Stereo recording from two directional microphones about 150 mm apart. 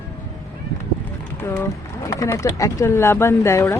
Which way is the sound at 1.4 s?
15° left (ahead or behind).